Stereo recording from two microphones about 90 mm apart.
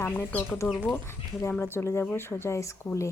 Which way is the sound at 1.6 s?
30° left (ahead or behind).